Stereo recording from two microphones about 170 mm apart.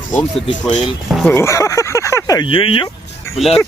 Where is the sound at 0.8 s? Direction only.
Centre (ahead or behind).